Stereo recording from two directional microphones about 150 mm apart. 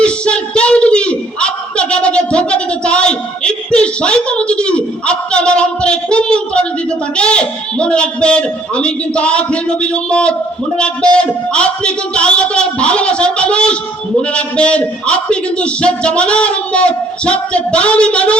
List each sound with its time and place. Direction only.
0.0 s a man's voice: 5° left (ahead or behind)